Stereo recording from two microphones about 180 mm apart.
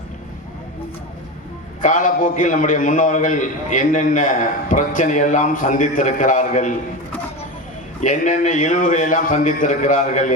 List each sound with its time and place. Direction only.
1.8 s a man's voice: 45° left (ahead or behind)
8.0 s a man's voice: 45° left (ahead or behind)